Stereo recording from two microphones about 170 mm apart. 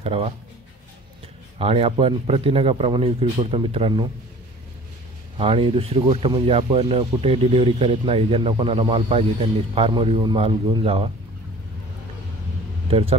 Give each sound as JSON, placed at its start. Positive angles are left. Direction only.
{"t": 0.0, "sound": "speech", "side_deg": -35}
{"t": 1.6, "sound": "speech", "side_deg": -35}
{"t": 5.4, "sound": "speech", "side_deg": -35}
{"t": 12.9, "sound": "speech", "side_deg": -35}